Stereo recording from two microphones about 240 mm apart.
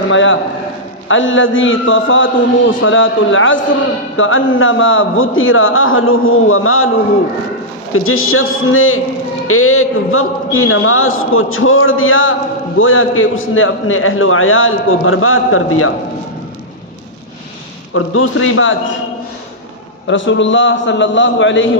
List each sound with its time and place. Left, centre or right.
0.1 s a man's voice: left
7.9 s a man's voice: left
17.9 s a man's voice: left
20.1 s a man's voice: left